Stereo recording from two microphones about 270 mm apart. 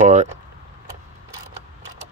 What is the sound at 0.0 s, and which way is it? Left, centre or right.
Speech, right.